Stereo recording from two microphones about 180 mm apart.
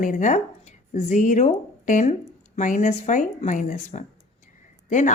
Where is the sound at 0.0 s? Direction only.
45° left (ahead or behind).